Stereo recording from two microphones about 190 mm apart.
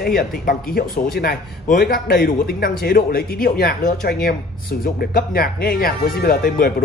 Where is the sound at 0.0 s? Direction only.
50° left (ahead or behind).